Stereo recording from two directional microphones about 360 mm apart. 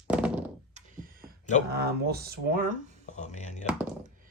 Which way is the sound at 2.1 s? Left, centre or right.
Right.